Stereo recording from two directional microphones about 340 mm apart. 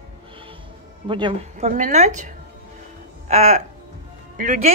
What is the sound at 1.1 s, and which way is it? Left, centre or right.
A woman's voice, centre.